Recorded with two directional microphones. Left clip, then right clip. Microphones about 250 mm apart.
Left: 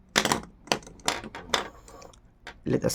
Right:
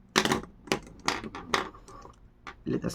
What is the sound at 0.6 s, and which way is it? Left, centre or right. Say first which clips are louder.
Typewriter: left 3 dB; centre.